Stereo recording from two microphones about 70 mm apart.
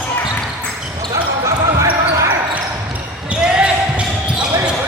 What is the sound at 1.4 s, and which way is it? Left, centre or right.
Basketball bounce, right.